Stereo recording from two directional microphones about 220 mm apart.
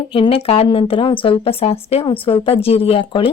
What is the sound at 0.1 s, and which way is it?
Speech, 25° left (ahead or behind).